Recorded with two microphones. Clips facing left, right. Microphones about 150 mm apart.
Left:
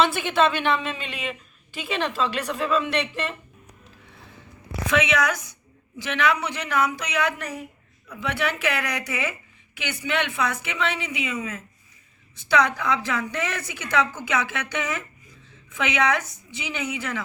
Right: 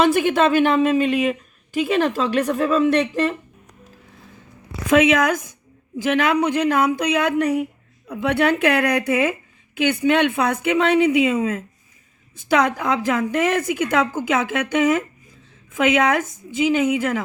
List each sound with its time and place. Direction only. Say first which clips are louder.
0.0 s a woman's voice: right 5 dB; 45° right (ahead or behind)
4.9 s a woman's voice: right 7 dB; 45° right (ahead or behind)